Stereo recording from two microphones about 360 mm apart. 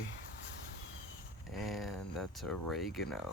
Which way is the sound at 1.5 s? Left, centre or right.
Centre.